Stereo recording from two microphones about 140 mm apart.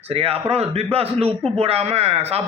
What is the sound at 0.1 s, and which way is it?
A man's voice, 45° right (ahead or behind).